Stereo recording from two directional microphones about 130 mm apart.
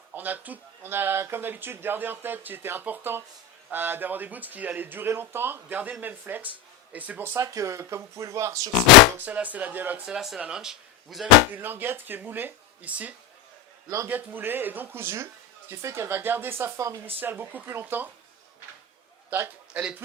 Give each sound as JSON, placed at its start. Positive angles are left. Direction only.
{"t": 0.1, "sound": "speech", "side_deg": -15}
{"t": 7.3, "sound": "speech", "side_deg": -25}
{"t": 9.1, "sound": "speech", "side_deg": -10}
{"t": 10.2, "sound": "speech", "side_deg": 0}
{"t": 11.5, "sound": "speech", "side_deg": -15}
{"t": 19.3, "sound": "a man's voice", "side_deg": -15}